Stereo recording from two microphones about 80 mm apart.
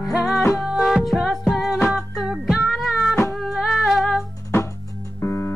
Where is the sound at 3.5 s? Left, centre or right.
Centre.